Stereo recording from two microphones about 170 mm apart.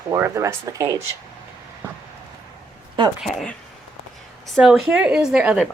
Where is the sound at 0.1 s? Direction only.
15° right (ahead or behind).